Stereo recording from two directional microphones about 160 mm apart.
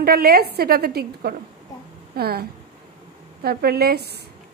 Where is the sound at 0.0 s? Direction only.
70° right (ahead or behind).